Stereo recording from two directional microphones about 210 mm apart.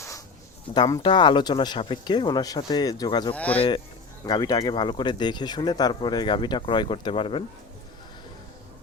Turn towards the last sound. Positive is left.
turn(degrees=25)  # may be behind; listen again after turning